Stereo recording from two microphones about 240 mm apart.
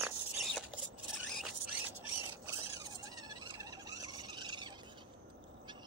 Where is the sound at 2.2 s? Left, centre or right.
Centre.